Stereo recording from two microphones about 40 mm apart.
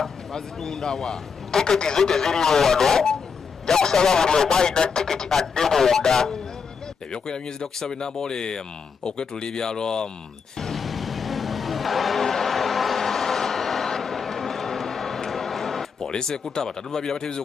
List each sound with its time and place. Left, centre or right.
0.0 s a man's voice: centre
10.6 s vehicle: centre
12.2 s a sound: centre
16.1 s speech: centre